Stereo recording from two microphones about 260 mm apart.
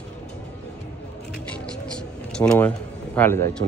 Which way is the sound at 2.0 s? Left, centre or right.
Centre.